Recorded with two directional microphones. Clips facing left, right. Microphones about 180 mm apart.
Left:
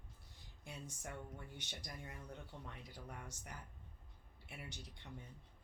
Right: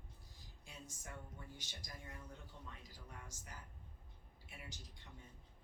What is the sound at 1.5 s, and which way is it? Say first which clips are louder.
Speech: left 4 dB; 65° left (ahead or behind).